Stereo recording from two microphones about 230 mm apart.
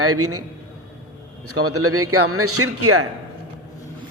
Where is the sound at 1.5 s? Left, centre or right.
Right.